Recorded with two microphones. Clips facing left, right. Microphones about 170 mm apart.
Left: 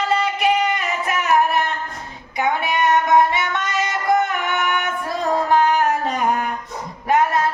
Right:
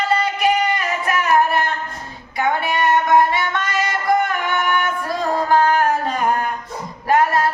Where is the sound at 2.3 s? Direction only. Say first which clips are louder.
Right 1 dB; 20° left (ahead or behind).